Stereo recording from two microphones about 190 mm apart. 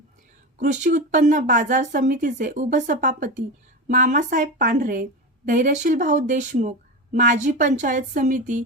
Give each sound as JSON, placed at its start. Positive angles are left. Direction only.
{"t": 0.9, "sound": "a woman's voice", "side_deg": -40}